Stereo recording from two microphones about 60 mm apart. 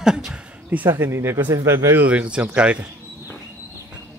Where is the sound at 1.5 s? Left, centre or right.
Right.